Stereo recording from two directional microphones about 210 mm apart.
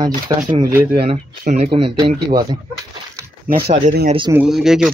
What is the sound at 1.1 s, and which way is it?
Speech, 30° right (ahead or behind).